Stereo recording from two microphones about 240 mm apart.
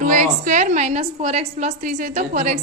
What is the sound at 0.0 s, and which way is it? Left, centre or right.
A woman's voice, right.